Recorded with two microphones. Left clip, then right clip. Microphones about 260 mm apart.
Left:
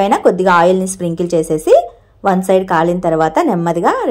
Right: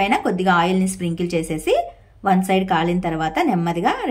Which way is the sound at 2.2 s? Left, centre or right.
Left.